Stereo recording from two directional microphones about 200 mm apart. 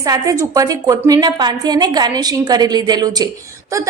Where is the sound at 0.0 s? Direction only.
15° right (ahead or behind).